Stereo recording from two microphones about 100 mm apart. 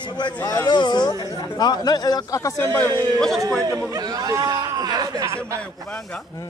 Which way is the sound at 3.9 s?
40° right (ahead or behind).